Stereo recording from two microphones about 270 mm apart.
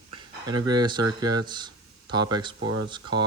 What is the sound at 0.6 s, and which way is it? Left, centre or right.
Speech, centre.